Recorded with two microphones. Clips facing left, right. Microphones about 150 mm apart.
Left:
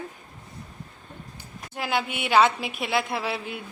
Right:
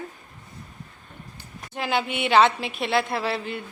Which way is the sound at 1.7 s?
5° left (ahead or behind).